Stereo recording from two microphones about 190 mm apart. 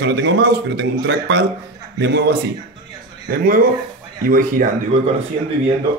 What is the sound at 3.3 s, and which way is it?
Speech, 50° right (ahead or behind).